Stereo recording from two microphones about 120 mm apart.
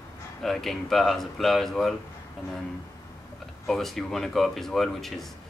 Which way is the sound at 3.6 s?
Centre (ahead or behind).